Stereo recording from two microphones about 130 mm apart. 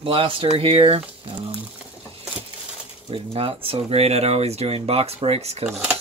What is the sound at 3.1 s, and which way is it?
Speech, 45° right (ahead or behind).